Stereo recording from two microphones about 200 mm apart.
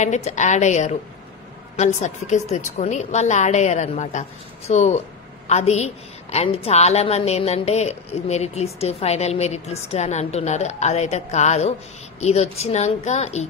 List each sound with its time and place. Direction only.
0.0 s a woman's voice: 35° left (ahead or behind)